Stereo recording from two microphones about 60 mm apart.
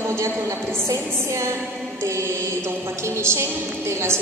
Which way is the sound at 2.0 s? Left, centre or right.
Right.